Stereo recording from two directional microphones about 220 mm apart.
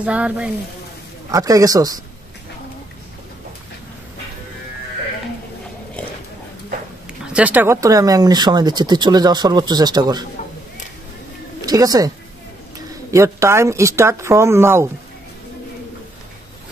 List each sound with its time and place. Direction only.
0.0 s speech: 5° right (ahead or behind)
1.3 s speech: 15° right (ahead or behind)
7.3 s speech: 5° right (ahead or behind)
11.6 s speech: 15° right (ahead or behind)
13.1 s speech: 15° right (ahead or behind)